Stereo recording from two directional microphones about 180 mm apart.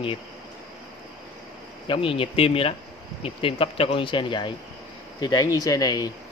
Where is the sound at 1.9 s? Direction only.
30° left (ahead or behind).